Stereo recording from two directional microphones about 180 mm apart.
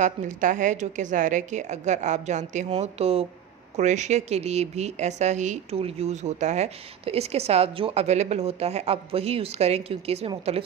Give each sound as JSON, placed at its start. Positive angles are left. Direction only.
{"t": 0.0, "sound": "speech", "side_deg": -45}